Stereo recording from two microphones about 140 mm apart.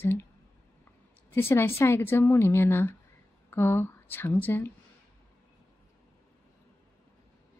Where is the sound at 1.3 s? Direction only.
15° left (ahead or behind).